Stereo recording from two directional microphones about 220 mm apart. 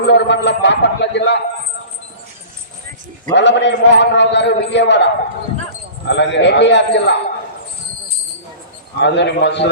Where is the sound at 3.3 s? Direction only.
55° left (ahead or behind).